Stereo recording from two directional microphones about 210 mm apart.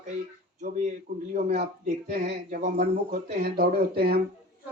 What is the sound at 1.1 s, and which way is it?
Speech, 50° right (ahead or behind).